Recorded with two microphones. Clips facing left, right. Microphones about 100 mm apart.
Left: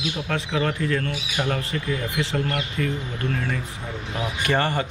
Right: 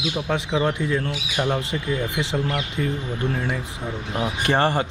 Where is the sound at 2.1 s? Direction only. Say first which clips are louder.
Right 1 dB; 20° right (ahead or behind).